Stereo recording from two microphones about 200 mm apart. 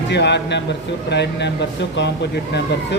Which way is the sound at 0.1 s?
60° left (ahead or behind).